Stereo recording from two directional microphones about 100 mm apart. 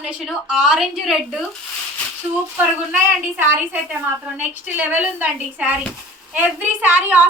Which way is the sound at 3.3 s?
20° right (ahead or behind).